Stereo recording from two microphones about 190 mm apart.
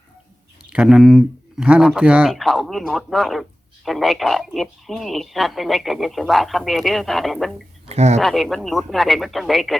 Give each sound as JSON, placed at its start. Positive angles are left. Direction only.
{"t": 0.7, "sound": "speech", "side_deg": -5}
{"t": 7.9, "sound": "speech", "side_deg": -35}
{"t": 8.2, "sound": "speech", "side_deg": 0}